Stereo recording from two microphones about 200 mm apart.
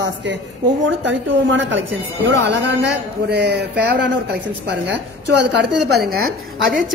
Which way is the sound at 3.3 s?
55° right (ahead or behind).